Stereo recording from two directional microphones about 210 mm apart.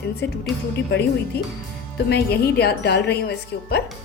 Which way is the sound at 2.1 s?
50° left (ahead or behind).